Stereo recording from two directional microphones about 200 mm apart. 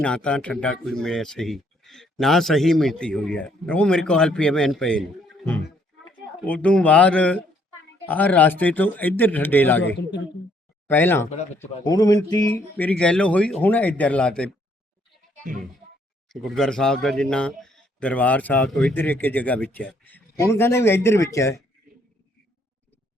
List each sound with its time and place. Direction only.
0.0 s speech: 5° left (ahead or behind)
6.4 s a man's voice: 5° left (ahead or behind)
10.8 s speech: 10° left (ahead or behind)
11.3 s speech: 35° left (ahead or behind)
11.9 s a sound: 20° left (ahead or behind)
12.7 s a man's voice: 5° left (ahead or behind)
16.3 s a man's voice: centre (ahead or behind)